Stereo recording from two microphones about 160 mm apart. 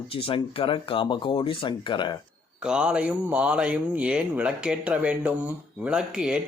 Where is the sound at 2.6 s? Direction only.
5° right (ahead or behind).